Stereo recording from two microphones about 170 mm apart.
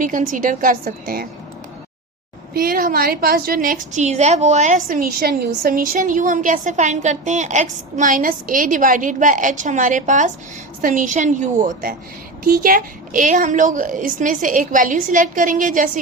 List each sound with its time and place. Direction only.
0.0 s a woman's voice: 50° right (ahead or behind)
2.5 s a woman's voice: 60° right (ahead or behind)